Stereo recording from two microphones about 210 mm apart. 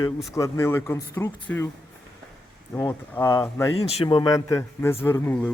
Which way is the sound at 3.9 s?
25° left (ahead or behind).